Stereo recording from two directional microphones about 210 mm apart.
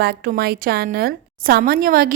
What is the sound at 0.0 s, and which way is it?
A woman's voice, 50° right (ahead or behind).